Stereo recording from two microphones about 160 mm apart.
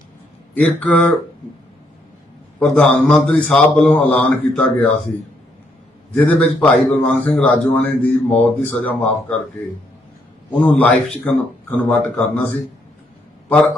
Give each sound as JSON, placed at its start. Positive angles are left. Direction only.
{"t": 0.5, "sound": "a man's voice", "side_deg": 10}
{"t": 2.6, "sound": "a man's voice", "side_deg": 5}
{"t": 6.1, "sound": "a man's voice", "side_deg": 10}
{"t": 10.5, "sound": "a man's voice", "side_deg": 10}